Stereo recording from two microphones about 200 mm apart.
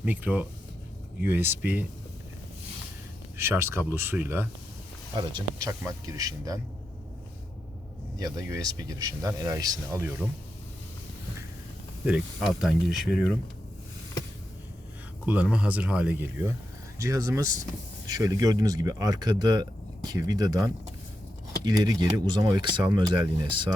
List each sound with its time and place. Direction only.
0.0 s speech: 5° right (ahead or behind)
3.3 s speech: 10° right (ahead or behind)
8.2 s speech: 15° right (ahead or behind)
12.0 s speech: 5° right (ahead or behind)
15.3 s speech: 5° right (ahead or behind); by 23.7 s 20° right (ahead or behind)